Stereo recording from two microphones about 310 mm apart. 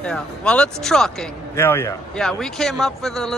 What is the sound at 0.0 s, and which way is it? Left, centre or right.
A man's voice, centre.